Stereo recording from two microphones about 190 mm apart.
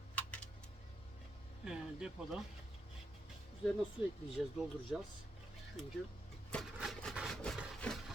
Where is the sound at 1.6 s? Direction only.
5° right (ahead or behind).